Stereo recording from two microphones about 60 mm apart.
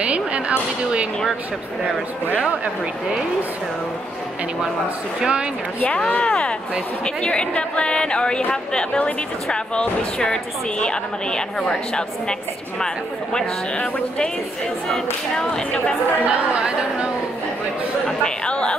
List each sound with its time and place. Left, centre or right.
0.0 s speech: right
2.6 s speech: centre
5.9 s a woman's voice: centre
15.3 s a woman's voice: centre
16.3 s speech: centre
18.0 s speech: centre